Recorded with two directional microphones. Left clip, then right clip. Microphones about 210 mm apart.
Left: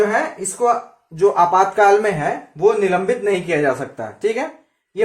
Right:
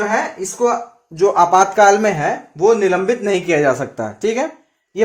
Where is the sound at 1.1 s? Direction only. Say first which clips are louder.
Right 2 dB; 45° right (ahead or behind).